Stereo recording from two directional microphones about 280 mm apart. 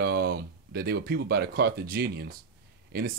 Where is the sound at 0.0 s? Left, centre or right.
Right.